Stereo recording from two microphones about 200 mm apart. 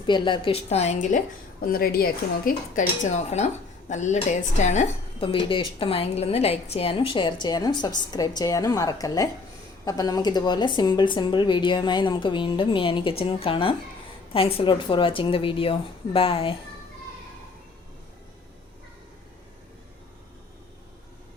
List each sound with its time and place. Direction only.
0.0 s a woman's voice: 25° left (ahead or behind)
1.6 s speech: 50° left (ahead or behind); by 16.6 s 25° left (ahead or behind)